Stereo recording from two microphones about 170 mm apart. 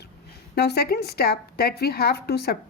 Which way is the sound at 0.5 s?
70° left (ahead or behind).